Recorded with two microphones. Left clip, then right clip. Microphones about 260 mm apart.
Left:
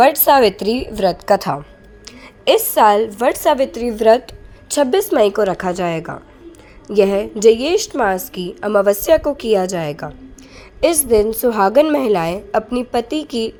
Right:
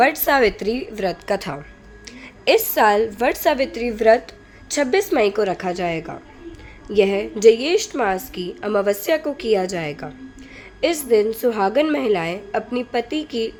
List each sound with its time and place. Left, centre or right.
0.0 s a woman's voice: centre